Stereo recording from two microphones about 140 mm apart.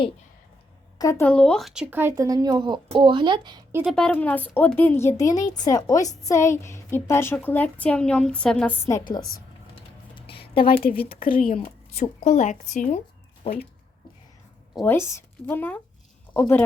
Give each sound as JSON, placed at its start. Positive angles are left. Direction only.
{"t": 0.9, "sound": "speech", "side_deg": 20}
{"t": 1.3, "sound": "speech", "side_deg": 5}
{"t": 3.7, "sound": "a woman's voice", "side_deg": -15}
{"t": 3.9, "sound": "a woman's voice", "side_deg": 10}
{"t": 8.9, "sound": "a woman's voice", "side_deg": 30}
{"t": 10.2, "sound": "a sound", "side_deg": 40}
{"t": 11.1, "sound": "speech", "side_deg": 85}
{"t": 11.5, "sound": "speech", "side_deg": 50}
{"t": 14.8, "sound": "a woman's voice", "side_deg": 15}